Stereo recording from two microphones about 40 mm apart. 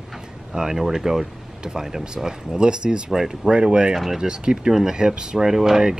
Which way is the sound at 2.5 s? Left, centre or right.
Right.